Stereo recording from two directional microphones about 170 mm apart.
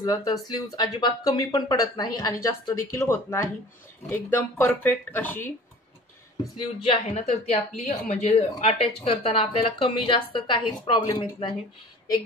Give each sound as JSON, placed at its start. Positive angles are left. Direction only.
{"t": 0.0, "sound": "speech", "side_deg": 20}
{"t": 6.5, "sound": "a woman's voice", "side_deg": 40}